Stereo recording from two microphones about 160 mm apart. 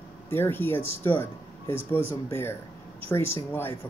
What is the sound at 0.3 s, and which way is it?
Speech, 15° left (ahead or behind).